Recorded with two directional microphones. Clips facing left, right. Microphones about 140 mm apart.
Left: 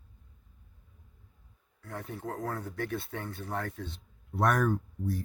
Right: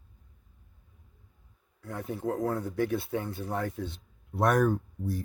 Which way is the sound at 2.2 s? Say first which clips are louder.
Right 7 dB; 20° right (ahead or behind).